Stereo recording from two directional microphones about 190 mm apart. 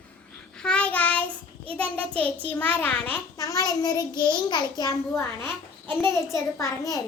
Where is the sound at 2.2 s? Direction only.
10° left (ahead or behind).